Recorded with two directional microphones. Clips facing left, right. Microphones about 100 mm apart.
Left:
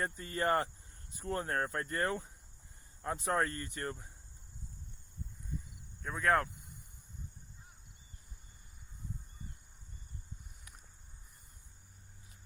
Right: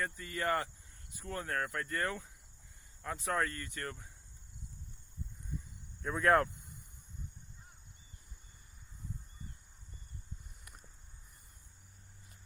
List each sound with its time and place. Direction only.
0.0 s speech: 35° left (ahead or behind)
5.5 s cricket: centre (ahead or behind)